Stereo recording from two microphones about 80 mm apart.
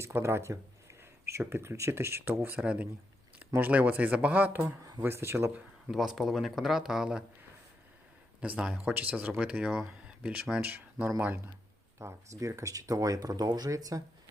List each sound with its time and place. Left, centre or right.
0.0 s speech: right
2.3 s speech: right
4.6 s speech: right
5.0 s speech: right
5.9 s speech: centre
8.4 s speech: centre
10.6 s speech: right
11.9 s speech: right